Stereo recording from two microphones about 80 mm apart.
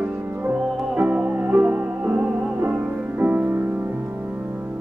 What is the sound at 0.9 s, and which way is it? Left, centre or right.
Music, centre.